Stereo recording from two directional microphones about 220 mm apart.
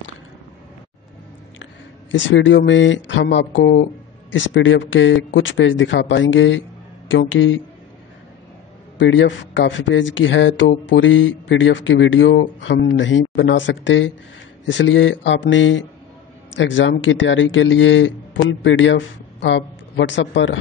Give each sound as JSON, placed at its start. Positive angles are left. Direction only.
{"t": 2.1, "sound": "a man's voice", "side_deg": 55}
{"t": 8.9, "sound": "a man's voice", "side_deg": 55}